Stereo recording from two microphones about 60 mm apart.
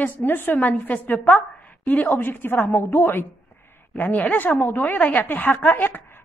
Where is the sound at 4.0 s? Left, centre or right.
Left.